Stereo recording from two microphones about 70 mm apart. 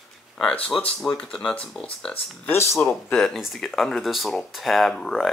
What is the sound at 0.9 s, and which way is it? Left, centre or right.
Speech, centre.